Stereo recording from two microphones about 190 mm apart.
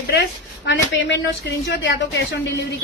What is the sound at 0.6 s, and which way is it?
Speech, 65° left (ahead or behind).